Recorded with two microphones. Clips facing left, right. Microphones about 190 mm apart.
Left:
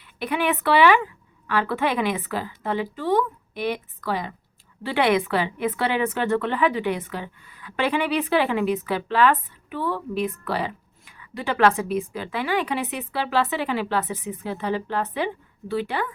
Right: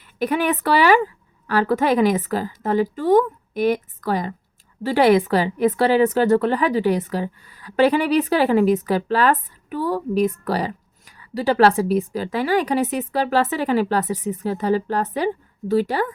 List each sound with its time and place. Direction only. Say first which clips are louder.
0.2 s a woman's voice: right 4 dB; 40° right (ahead or behind)